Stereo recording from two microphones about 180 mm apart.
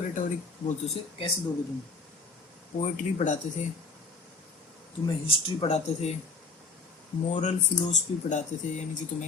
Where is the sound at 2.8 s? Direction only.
45° left (ahead or behind).